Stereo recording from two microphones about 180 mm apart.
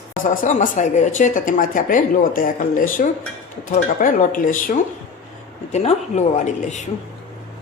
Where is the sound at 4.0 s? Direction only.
50° left (ahead or behind).